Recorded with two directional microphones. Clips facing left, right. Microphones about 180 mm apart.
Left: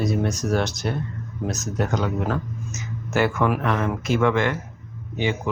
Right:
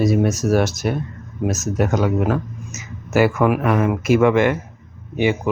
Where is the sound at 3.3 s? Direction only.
10° right (ahead or behind).